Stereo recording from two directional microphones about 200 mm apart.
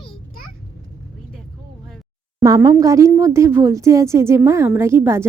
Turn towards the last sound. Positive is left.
turn(degrees=-10)  # may be behind; listen again after turning